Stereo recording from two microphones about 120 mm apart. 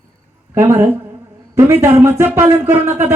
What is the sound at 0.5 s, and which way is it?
A woman's voice, 20° right (ahead or behind).